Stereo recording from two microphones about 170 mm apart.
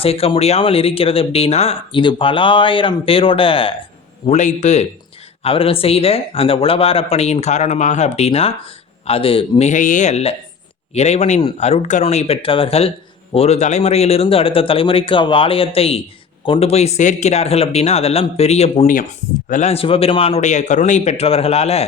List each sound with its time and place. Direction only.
0.0 s speech: 35° left (ahead or behind)
4.3 s a man's voice: 45° left (ahead or behind)